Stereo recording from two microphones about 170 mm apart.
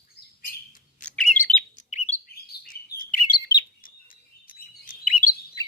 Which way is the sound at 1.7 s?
45° left (ahead or behind).